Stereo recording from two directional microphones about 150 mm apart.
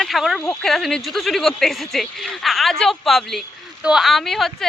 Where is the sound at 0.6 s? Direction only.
Centre (ahead or behind).